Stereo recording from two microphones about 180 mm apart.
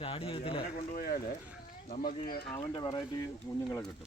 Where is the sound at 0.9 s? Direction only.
55° left (ahead or behind).